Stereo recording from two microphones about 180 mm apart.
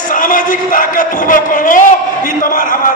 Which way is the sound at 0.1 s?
50° left (ahead or behind).